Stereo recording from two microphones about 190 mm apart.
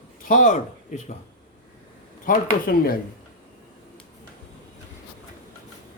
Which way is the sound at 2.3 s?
50° left (ahead or behind).